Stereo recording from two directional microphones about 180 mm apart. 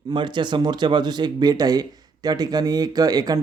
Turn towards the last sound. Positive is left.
turn(degrees=-20)  # may be behind; listen again after turning